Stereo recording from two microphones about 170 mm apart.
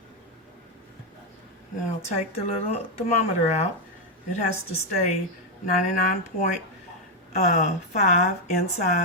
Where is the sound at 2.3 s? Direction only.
35° left (ahead or behind).